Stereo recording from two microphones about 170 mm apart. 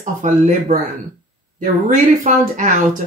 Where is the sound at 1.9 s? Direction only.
50° right (ahead or behind).